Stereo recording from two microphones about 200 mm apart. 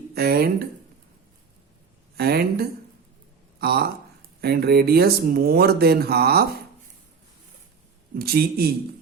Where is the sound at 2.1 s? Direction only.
50° right (ahead or behind).